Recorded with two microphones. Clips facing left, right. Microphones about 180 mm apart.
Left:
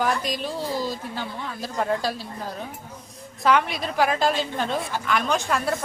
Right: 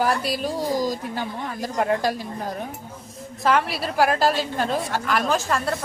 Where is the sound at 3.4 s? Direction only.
Centre (ahead or behind).